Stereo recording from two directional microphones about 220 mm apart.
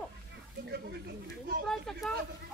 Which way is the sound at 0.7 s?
45° right (ahead or behind).